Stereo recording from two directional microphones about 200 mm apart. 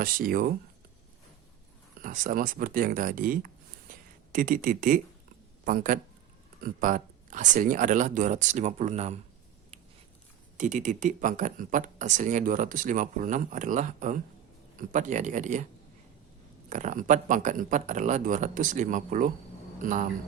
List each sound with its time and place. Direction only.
0.0 s speech: 45° right (ahead or behind)
2.0 s speech: 40° right (ahead or behind)
10.6 s speech: 40° right (ahead or behind)
16.6 s speech: 40° right (ahead or behind)